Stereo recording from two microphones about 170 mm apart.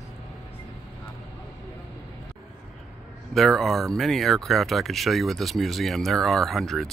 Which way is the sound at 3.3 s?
Centre (ahead or behind).